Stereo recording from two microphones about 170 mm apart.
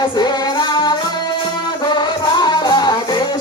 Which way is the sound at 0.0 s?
25° left (ahead or behind).